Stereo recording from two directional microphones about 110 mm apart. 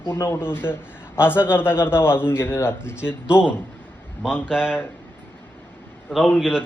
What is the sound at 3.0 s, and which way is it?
A man's voice, 10° right (ahead or behind).